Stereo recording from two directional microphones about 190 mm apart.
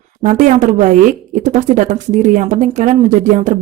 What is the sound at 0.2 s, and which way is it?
Speech, 40° right (ahead or behind).